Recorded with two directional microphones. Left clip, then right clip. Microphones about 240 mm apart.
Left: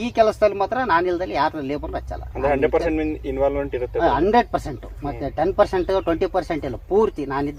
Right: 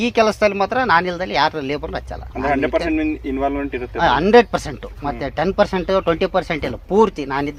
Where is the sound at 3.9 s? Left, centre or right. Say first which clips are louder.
Right 5 dB; right.